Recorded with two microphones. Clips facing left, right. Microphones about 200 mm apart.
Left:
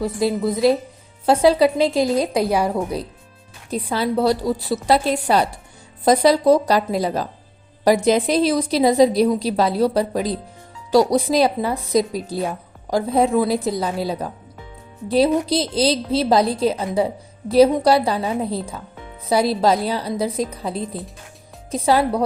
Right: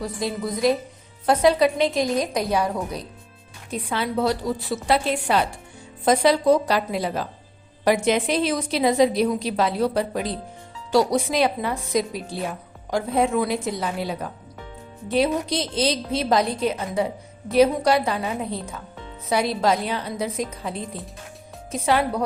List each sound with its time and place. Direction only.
0.0 s a woman's voice: 25° left (ahead or behind)